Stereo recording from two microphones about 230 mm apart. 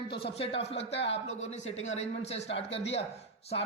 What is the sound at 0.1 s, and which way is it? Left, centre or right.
Speech, left.